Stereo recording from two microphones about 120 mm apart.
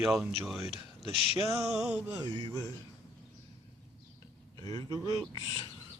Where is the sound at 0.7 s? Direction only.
Centre (ahead or behind).